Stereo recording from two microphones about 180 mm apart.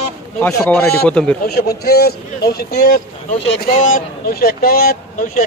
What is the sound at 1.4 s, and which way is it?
A man's voice, 60° left (ahead or behind).